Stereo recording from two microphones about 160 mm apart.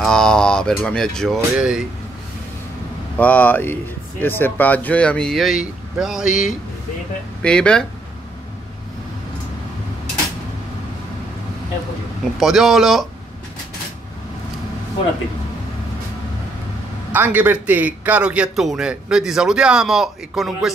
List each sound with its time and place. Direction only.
0.0 s a man's voice: 5° left (ahead or behind)
3.2 s a man's voice: 10° left (ahead or behind)
12.4 s a man's voice: centre (ahead or behind)
17.1 s a man's voice: 10° right (ahead or behind)